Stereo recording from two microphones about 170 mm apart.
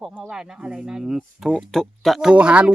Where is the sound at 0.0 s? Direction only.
5° right (ahead or behind).